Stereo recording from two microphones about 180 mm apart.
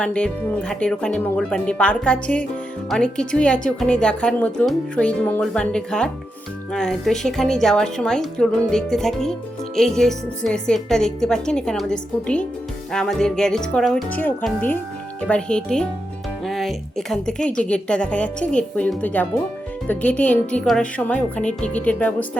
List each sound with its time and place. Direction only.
0.0 s a woman's voice: 5° left (ahead or behind)